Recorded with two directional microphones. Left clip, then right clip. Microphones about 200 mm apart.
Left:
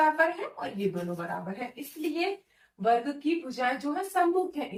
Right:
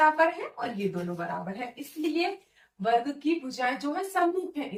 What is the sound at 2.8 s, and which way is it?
Speech, 5° left (ahead or behind).